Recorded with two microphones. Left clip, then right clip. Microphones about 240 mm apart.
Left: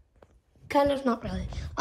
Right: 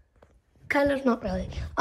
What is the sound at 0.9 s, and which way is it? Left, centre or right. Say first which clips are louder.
Speech: right 2 dB; centre.